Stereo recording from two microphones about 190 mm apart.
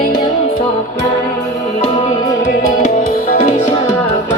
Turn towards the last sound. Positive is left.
turn(degrees=35)  # may be behind; listen again after turning